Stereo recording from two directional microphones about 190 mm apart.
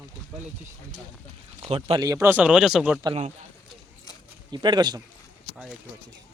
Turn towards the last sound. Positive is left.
turn(degrees=-20)  # may be behind; listen again after turning